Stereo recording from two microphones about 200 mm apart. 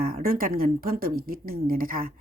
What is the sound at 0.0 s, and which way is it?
A woman's voice, 45° right (ahead or behind).